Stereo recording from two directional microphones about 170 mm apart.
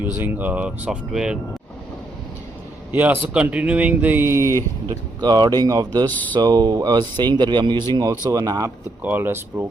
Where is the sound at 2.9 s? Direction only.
10° right (ahead or behind).